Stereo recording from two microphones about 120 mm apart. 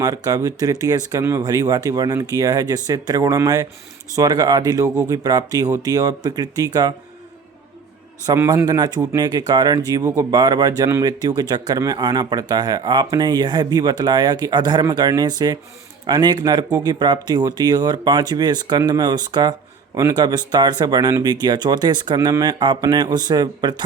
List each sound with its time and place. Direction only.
0.0 s speech: 30° right (ahead or behind)
8.4 s speech: 30° right (ahead or behind)